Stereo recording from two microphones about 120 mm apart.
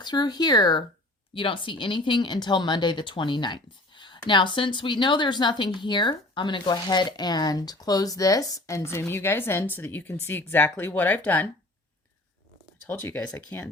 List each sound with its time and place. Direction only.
0.0 s speech: 35° left (ahead or behind); by 11.4 s 15° left (ahead or behind)
12.9 s speech: 20° left (ahead or behind)